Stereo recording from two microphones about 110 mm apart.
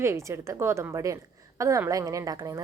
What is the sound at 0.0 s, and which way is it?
A woman's voice, 25° right (ahead or behind).